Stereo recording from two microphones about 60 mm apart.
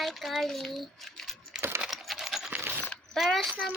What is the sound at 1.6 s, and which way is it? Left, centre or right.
Computer keyboard, right.